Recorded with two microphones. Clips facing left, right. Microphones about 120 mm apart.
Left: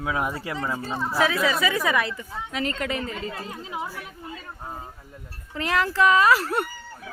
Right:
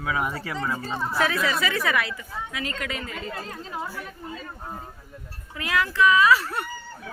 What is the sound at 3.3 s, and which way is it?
Speech, 5° left (ahead or behind).